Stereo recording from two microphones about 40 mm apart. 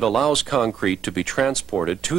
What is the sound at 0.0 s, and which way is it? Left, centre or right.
Speech, centre.